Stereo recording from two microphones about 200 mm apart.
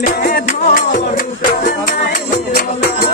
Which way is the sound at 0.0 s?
45° left (ahead or behind).